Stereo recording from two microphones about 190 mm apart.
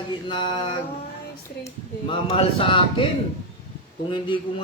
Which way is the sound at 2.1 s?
30° left (ahead or behind).